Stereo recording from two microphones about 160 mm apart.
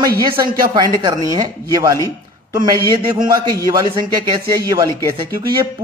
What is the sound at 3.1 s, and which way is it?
A man's voice, 25° right (ahead or behind).